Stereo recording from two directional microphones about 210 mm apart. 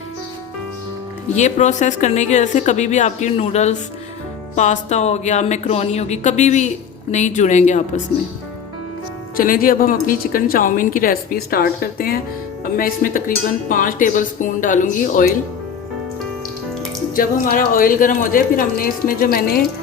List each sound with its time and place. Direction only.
1.3 s speech: 35° left (ahead or behind)
9.4 s a woman's voice: 40° left (ahead or behind)
17.2 s speech: 40° left (ahead or behind)